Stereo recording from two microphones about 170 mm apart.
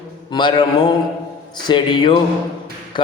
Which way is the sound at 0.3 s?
25° left (ahead or behind).